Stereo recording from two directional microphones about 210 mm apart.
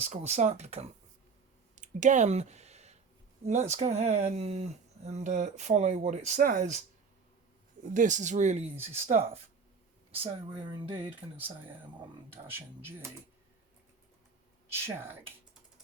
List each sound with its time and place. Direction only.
0.0 s speech: 30° right (ahead or behind)
1.7 s clicking: 35° right (ahead or behind)
3.4 s speech: 30° right (ahead or behind)
7.9 s speech: 35° right (ahead or behind)
11.3 s speech: 10° right (ahead or behind)
14.7 s speech: 10° right (ahead or behind)